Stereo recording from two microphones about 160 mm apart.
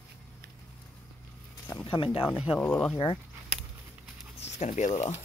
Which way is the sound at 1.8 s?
35° left (ahead or behind).